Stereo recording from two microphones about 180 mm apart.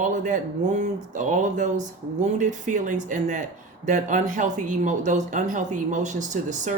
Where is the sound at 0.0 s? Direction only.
45° right (ahead or behind).